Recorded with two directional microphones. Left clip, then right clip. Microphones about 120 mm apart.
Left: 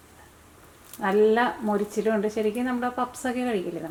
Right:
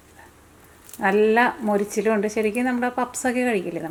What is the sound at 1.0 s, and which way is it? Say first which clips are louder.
Speech: right 3 dB; 40° right (ahead or behind).